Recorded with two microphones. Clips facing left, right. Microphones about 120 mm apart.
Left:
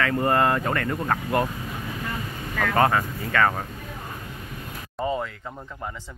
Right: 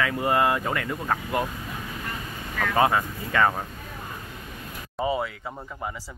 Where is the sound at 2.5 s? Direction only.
10° right (ahead or behind).